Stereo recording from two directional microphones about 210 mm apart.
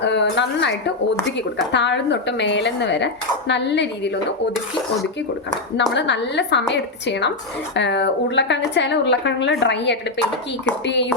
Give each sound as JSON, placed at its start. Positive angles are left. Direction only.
{"t": 0.0, "sound": "speech", "side_deg": 55}
{"t": 5.9, "sound": "speech", "side_deg": 55}